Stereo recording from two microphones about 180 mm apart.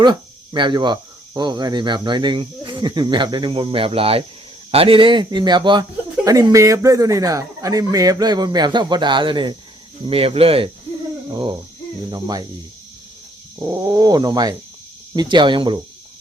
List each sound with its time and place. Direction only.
0.0 s speech: 25° right (ahead or behind)
13.6 s speech: 15° right (ahead or behind)